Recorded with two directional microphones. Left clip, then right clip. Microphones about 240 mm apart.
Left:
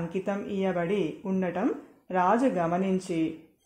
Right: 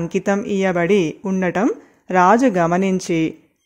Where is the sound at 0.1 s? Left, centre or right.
Right.